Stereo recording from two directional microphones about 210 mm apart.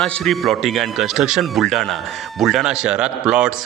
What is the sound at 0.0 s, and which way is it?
Speech, centre (ahead or behind).